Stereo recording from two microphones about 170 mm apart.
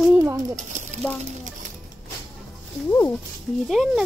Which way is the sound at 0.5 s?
45° right (ahead or behind).